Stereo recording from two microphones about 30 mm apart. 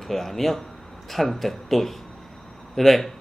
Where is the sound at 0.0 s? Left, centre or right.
Centre.